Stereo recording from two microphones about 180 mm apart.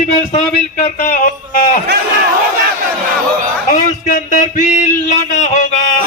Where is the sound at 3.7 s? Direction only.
45° left (ahead or behind).